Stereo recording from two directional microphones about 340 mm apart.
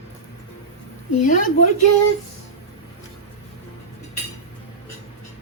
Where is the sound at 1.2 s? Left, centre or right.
Left.